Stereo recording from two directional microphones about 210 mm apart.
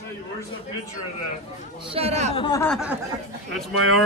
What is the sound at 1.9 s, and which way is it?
Speech, 30° right (ahead or behind).